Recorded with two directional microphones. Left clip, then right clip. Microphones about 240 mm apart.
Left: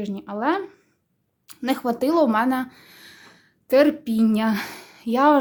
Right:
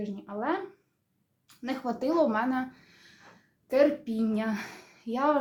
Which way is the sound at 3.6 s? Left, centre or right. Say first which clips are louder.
Left 7 dB; left.